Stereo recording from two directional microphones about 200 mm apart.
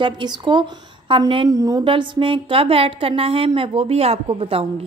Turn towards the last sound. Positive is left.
turn(degrees=-25)  # may be behind; listen again after turning